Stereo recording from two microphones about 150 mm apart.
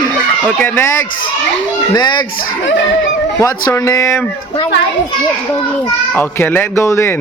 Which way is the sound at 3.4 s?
20° left (ahead or behind).